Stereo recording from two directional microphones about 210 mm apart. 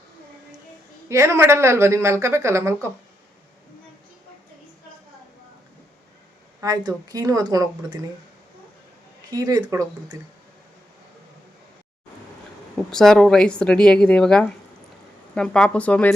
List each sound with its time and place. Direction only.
1.0 s a woman's voice: 15° right (ahead or behind)
6.6 s a woman's voice: 20° right (ahead or behind)
9.3 s a woman's voice: 20° right (ahead or behind)
12.9 s speech: centre (ahead or behind)